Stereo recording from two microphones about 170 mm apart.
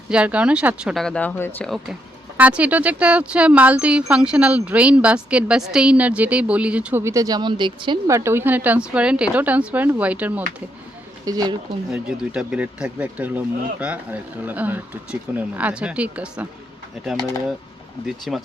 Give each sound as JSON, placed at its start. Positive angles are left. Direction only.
{"t": 0.1, "sound": "speech", "side_deg": -5}
{"t": 0.9, "sound": "speech", "side_deg": 5}
{"t": 2.4, "sound": "speech", "side_deg": -10}
{"t": 11.3, "sound": "speech", "side_deg": -20}
{"t": 11.9, "sound": "speech", "side_deg": -5}
{"t": 18.0, "sound": "speech", "side_deg": 0}